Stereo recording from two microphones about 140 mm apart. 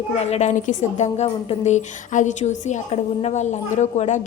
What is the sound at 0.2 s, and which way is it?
A woman's voice, 50° left (ahead or behind).